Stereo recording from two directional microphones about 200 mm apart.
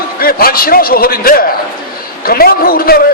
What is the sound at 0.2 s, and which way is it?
A man's voice, 50° left (ahead or behind).